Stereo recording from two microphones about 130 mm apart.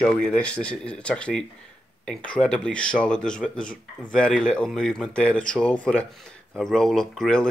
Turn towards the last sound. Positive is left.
turn(degrees=5)  # may be behind; listen again after turning